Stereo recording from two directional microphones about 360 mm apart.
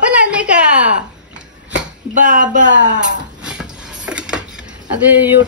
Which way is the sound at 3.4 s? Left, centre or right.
Centre.